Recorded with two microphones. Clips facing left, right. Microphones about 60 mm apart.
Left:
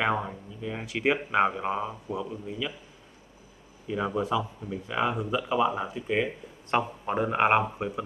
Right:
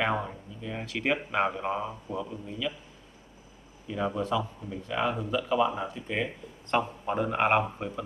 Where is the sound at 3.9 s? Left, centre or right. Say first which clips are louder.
Left 1 dB; centre.